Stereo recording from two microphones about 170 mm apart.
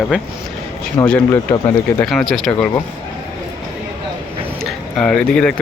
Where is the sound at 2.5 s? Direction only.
15° left (ahead or behind).